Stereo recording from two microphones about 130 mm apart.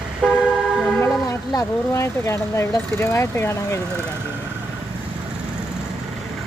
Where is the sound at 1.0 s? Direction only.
25° left (ahead or behind).